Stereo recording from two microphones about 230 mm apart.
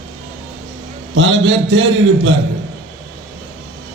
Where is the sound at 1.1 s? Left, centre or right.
Right.